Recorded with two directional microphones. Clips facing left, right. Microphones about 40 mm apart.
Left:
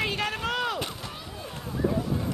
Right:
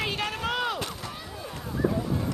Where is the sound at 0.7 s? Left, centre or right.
Left.